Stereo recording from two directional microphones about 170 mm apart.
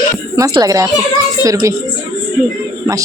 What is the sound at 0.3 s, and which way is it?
Speech, 20° right (ahead or behind).